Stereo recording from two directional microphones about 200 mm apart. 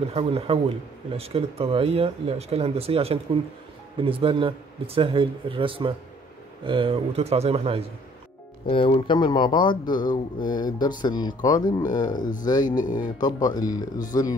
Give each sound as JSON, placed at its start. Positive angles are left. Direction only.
{"t": 0.1, "sound": "speech", "side_deg": -30}
{"t": 8.6, "sound": "speech", "side_deg": 25}
{"t": 12.2, "sound": "speech", "side_deg": 40}
{"t": 13.2, "sound": "speech", "side_deg": 20}